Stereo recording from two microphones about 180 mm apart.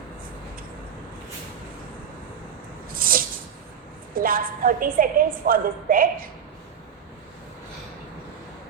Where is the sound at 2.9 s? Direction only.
50° right (ahead or behind).